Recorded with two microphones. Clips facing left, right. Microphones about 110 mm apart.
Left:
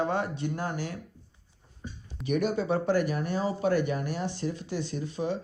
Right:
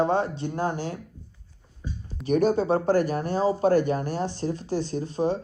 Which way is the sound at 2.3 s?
35° right (ahead or behind).